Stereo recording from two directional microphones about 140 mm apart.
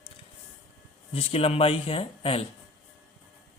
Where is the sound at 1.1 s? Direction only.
45° left (ahead or behind).